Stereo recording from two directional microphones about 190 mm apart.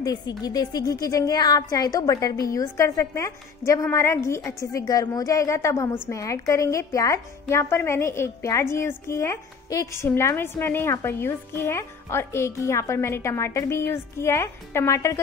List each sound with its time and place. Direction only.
0.0 s a woman's voice: 20° left (ahead or behind)